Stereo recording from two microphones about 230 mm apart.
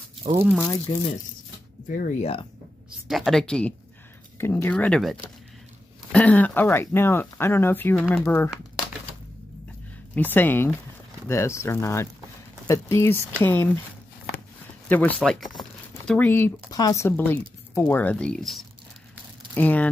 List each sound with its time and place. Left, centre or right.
0.2 s speech: right
0.9 s speech: centre
1.9 s speech: left
3.1 s speech: centre
10.1 s speech: centre
14.9 s speech: centre